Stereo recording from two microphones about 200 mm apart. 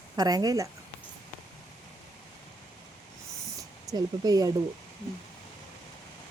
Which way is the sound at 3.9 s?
20° right (ahead or behind).